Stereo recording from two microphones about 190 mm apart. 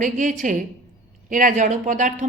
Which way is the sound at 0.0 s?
40° right (ahead or behind).